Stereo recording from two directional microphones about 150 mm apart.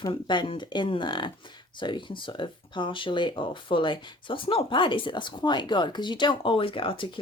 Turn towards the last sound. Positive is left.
turn(degrees=35)  # may be behind; listen again after turning